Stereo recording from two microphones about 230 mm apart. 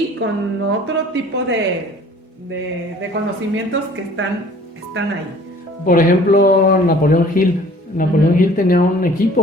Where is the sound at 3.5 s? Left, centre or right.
Right.